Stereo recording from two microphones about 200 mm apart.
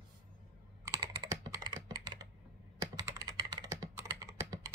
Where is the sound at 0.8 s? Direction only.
20° right (ahead or behind).